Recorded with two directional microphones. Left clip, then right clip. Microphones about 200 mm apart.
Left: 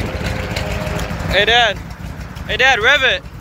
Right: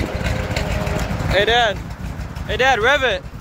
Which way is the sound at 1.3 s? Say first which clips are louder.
Left 3 dB; 20° right (ahead or behind).